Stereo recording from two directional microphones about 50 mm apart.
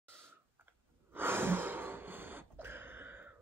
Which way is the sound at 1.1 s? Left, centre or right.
Right.